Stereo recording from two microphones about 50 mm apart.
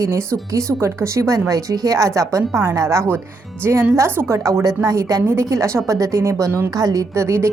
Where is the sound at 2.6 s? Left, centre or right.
Right.